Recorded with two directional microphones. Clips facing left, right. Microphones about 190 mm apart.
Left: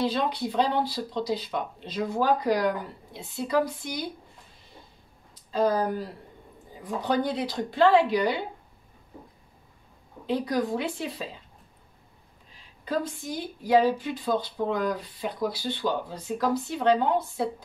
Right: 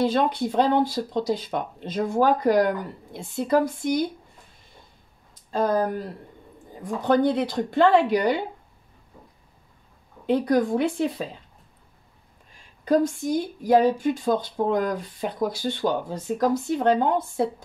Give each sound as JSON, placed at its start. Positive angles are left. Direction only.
{"t": 0.0, "sound": "speech", "side_deg": -50}
{"t": 5.5, "sound": "speech", "side_deg": -50}
{"t": 10.2, "sound": "speech", "side_deg": -50}
{"t": 12.5, "sound": "speech", "side_deg": -45}